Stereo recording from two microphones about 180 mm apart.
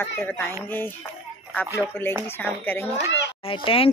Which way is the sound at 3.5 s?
30° left (ahead or behind).